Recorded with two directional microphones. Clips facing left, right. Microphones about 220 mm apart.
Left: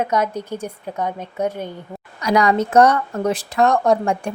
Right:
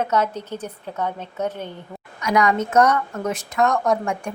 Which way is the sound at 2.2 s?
35° left (ahead or behind).